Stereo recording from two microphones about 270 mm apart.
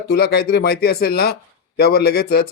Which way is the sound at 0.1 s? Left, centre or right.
Left.